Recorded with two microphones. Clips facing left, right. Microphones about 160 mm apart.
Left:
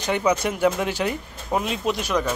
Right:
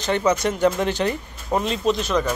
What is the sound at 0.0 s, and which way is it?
Speech, 10° left (ahead or behind).